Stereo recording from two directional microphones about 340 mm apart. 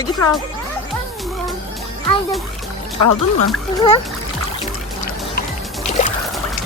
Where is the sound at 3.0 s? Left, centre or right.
Left.